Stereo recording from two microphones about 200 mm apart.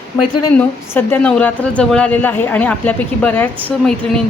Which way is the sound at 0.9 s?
10° left (ahead or behind).